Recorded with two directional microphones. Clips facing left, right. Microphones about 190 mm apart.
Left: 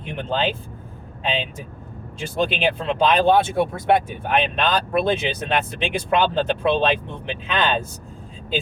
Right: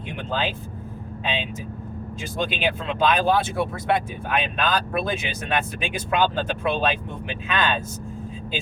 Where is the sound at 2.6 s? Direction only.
30° left (ahead or behind).